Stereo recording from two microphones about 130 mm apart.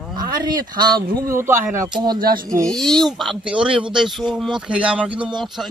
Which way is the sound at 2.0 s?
35° right (ahead or behind).